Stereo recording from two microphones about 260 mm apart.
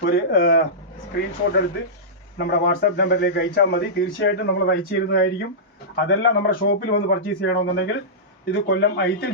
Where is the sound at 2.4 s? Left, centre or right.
Left.